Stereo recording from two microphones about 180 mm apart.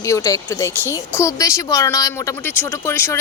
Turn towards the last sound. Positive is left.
turn(degrees=15)  # may be behind; listen again after turning